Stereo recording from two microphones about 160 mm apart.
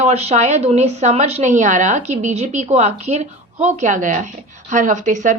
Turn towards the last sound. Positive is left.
turn(degrees=-50)  # may be behind; listen again after turning